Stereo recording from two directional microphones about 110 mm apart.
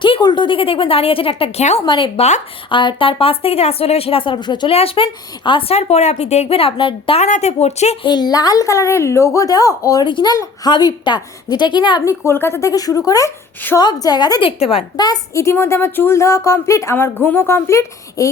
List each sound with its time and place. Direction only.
0.0 s speech: 45° left (ahead or behind); by 1.8 s 75° left (ahead or behind)
1.8 s a woman's voice: 45° left (ahead or behind)
2.1 s speech: 90° left
2.6 s speech: 50° left (ahead or behind)
4.7 s speech: 60° left (ahead or behind)
5.5 s a woman's voice: 50° left (ahead or behind)
5.7 s a woman's voice: 80° left; by 7.2 s 50° left (ahead or behind)
7.2 s speech: 90° left
8.0 s a woman's voice: 40° left (ahead or behind)
12.0 s speech: 25° left (ahead or behind); by 14.4 s 40° left (ahead or behind)
14.4 s speech: 60° left (ahead or behind)
14.9 s speech: 35° left (ahead or behind)